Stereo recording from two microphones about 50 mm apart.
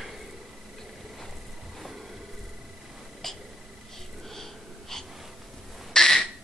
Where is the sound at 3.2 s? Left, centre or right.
Centre.